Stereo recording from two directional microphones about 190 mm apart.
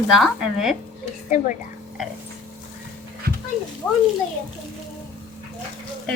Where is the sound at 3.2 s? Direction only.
55° right (ahead or behind).